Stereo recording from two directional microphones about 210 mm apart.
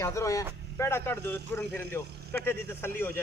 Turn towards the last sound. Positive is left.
turn(degrees=10)  # may be behind; listen again after turning